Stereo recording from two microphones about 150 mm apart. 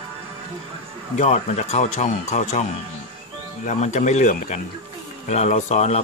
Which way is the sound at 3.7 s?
50° left (ahead or behind).